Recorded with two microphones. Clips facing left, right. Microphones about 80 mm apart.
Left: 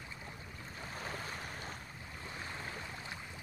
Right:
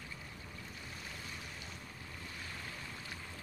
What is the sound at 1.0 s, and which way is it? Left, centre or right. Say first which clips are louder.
Waves: left 8 dB; left.